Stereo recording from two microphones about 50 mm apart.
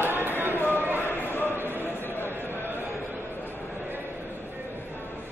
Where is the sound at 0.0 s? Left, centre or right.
Right.